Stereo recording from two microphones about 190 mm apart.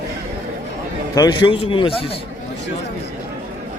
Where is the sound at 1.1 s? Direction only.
25° left (ahead or behind).